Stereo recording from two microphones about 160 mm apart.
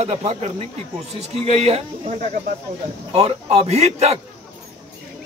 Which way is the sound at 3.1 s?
40° right (ahead or behind).